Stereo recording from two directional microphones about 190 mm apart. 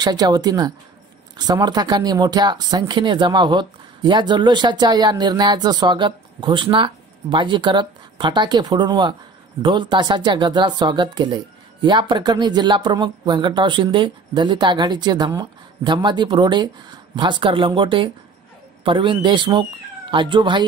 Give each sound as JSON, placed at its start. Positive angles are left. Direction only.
{"t": 0.0, "sound": "speech", "side_deg": -20}